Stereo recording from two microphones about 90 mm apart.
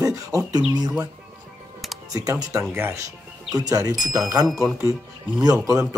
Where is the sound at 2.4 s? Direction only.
30° right (ahead or behind).